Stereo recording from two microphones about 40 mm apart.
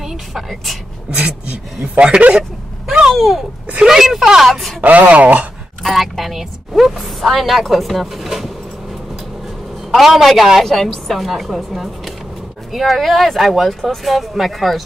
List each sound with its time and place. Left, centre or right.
0.3 s a woman's voice: centre
1.1 s speech: right
3.1 s speech: centre
4.8 s speech: right
5.1 s speech: right
5.8 s a woman's voice: centre
9.8 s a woman's voice: centre
10.6 s a woman's voice: centre